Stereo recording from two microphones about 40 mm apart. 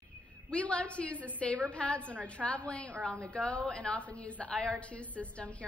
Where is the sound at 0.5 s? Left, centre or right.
Left.